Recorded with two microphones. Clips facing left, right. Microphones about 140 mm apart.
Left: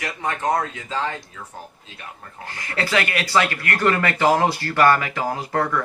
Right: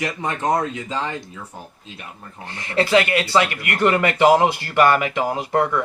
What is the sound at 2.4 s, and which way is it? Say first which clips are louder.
Speech: right 5 dB; 25° right (ahead or behind).